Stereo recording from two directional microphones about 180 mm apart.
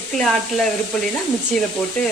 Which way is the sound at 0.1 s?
Centre (ahead or behind).